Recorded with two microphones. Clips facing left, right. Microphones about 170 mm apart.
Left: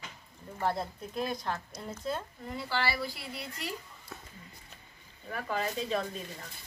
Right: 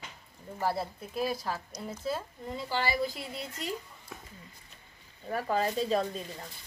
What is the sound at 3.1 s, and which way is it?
Speech, 45° right (ahead or behind).